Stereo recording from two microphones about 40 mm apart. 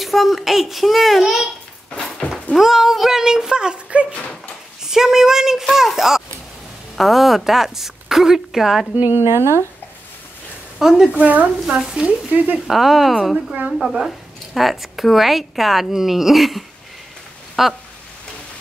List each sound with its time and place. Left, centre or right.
0.0 s speech: centre
2.0 s horse: centre
2.5 s a woman's voice: centre; by 4.1 s right
4.8 s a woman's voice: centre
9.1 s speech: right
10.8 s a woman's voice: centre
11.1 s speech: right
12.0 s speech: right
12.3 s speech: right
12.6 s speech: centre